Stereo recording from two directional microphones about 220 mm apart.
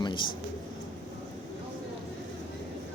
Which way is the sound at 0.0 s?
20° left (ahead or behind).